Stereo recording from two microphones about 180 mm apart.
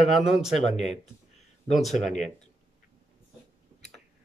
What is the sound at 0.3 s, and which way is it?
Speech, centre (ahead or behind).